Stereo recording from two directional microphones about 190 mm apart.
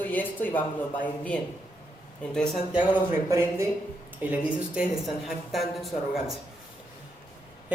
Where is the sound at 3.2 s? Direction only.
15° right (ahead or behind); by 6.3 s centre (ahead or behind).